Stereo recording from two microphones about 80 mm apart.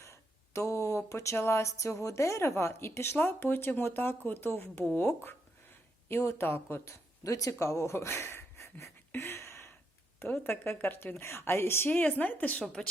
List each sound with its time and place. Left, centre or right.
0.0 s speech: left
7.3 s speech: left; by 12.9 s centre